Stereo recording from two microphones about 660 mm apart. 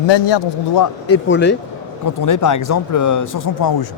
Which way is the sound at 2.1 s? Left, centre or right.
Left.